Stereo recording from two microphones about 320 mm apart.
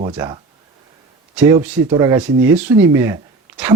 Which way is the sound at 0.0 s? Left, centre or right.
Centre.